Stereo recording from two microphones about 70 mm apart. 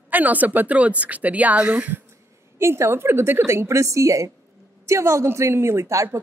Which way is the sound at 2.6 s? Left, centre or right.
Right.